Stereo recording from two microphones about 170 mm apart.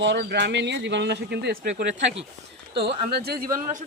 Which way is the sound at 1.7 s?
45° right (ahead or behind).